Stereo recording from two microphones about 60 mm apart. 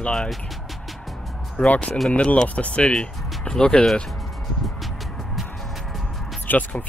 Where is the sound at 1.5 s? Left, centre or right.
Left.